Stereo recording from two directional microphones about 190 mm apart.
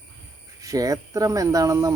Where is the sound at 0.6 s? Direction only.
20° right (ahead or behind).